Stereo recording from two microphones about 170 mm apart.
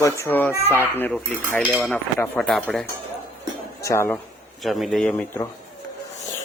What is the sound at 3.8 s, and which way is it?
Speech, 15° left (ahead or behind).